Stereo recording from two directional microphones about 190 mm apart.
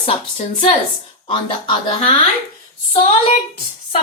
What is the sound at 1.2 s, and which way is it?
Speech, 25° left (ahead or behind).